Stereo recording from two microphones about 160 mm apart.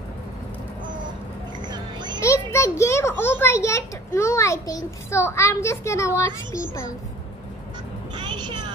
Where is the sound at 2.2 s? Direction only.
15° left (ahead or behind).